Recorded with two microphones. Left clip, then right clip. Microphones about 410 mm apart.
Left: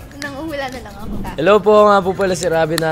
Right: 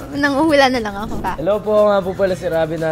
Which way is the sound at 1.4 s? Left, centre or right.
Left.